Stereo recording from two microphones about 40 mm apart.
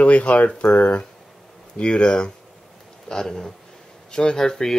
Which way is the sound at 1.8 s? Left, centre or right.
Left.